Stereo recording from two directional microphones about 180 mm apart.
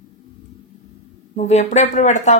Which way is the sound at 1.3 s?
40° left (ahead or behind).